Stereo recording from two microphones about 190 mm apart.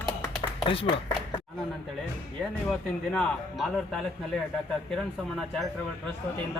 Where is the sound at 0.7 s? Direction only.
30° left (ahead or behind).